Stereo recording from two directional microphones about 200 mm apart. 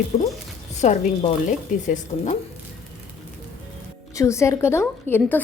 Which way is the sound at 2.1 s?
30° left (ahead or behind).